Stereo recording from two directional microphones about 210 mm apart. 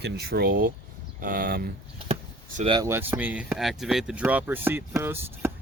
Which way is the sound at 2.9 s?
10° right (ahead or behind).